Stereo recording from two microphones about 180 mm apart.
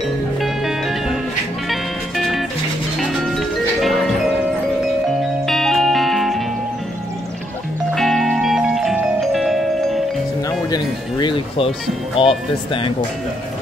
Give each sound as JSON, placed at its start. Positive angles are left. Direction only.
{"t": 0.4, "sound": "music", "side_deg": 0}
{"t": 5.5, "sound": "music", "side_deg": 0}
{"t": 7.9, "sound": "music", "side_deg": 0}
{"t": 10.7, "sound": "music", "side_deg": 25}
{"t": 12.2, "sound": "speech", "side_deg": 30}